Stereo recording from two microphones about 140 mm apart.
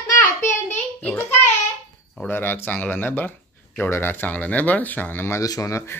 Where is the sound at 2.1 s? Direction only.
15° left (ahead or behind).